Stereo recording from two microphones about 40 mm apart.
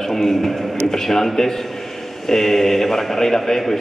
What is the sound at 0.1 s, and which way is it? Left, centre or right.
A man's voice, centre.